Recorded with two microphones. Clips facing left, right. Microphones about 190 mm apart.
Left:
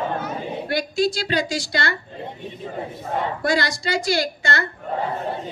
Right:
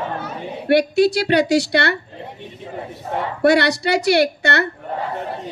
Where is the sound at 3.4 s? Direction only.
65° right (ahead or behind).